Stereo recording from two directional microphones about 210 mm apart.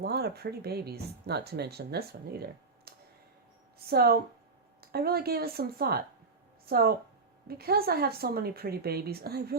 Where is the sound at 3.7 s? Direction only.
50° right (ahead or behind).